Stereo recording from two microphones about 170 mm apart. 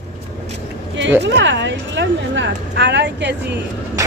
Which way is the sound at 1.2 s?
90° right.